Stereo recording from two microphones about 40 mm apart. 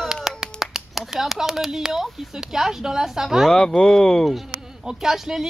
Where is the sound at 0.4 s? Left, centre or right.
Centre.